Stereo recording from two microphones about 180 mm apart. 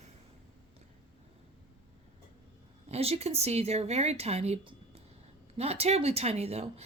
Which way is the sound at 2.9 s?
35° right (ahead or behind).